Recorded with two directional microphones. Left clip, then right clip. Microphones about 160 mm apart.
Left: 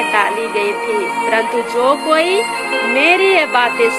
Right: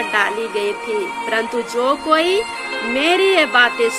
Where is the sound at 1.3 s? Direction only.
15° right (ahead or behind).